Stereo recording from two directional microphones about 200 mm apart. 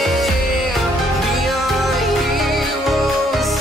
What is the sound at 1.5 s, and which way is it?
Music, centre (ahead or behind).